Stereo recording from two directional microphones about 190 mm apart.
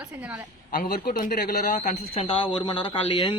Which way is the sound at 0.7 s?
45° left (ahead or behind).